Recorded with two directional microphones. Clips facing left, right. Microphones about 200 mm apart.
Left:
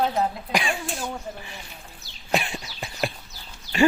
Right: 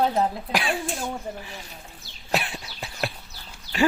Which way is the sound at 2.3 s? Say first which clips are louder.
Left 1 dB; centre (ahead or behind).